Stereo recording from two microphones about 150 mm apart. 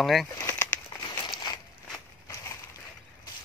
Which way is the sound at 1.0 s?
30° left (ahead or behind).